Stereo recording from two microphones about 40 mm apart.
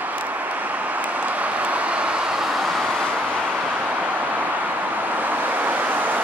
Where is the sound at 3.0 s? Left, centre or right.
Right.